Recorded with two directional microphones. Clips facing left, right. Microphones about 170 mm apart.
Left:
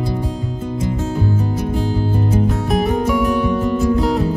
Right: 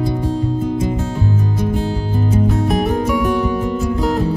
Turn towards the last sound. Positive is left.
turn(degrees=0)  # may be behind; listen again after turning